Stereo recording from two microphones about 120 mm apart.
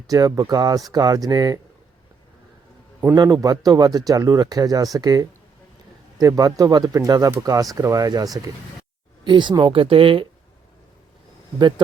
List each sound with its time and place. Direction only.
0.1 s speech: 30° right (ahead or behind)
3.2 s speech: 35° right (ahead or behind); by 10.2 s 50° right (ahead or behind)